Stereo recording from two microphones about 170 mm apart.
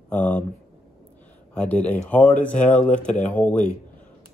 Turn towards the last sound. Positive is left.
turn(degrees=10)  # may be behind; listen again after turning